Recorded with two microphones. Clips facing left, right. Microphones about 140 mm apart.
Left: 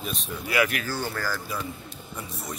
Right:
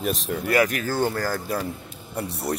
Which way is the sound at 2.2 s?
70° right (ahead or behind).